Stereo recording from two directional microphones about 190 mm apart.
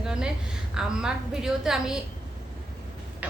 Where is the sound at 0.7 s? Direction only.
5° right (ahead or behind).